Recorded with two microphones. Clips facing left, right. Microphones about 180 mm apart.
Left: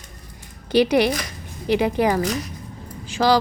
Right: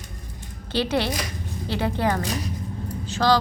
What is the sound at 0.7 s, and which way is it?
Speech, 15° left (ahead or behind).